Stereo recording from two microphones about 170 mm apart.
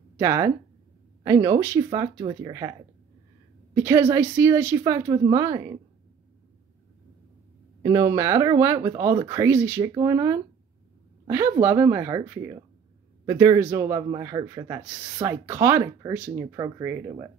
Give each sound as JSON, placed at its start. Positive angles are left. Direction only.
{"t": 0.2, "sound": "speech", "side_deg": -15}
{"t": 3.7, "sound": "speech", "side_deg": -15}
{"t": 7.8, "sound": "a woman's voice", "side_deg": -20}
{"t": 14.8, "sound": "speech", "side_deg": -5}
{"t": 15.1, "sound": "speech", "side_deg": -20}